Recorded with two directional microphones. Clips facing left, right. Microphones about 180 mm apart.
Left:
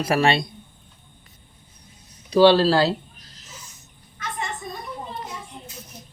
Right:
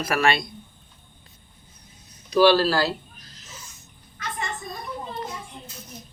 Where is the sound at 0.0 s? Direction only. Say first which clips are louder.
Left 3 dB; 30° left (ahead or behind).